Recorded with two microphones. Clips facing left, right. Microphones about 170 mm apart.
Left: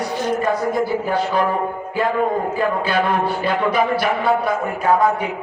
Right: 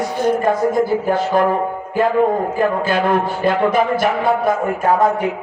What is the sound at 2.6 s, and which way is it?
Speech, 45° right (ahead or behind).